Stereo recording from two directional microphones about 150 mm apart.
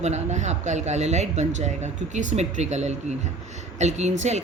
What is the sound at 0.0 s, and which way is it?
A woman's voice, 50° right (ahead or behind).